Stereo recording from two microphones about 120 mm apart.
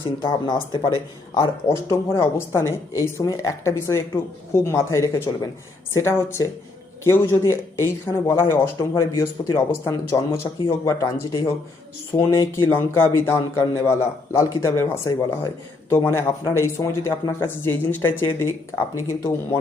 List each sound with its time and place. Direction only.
1.6 s a man's voice: 20° left (ahead or behind)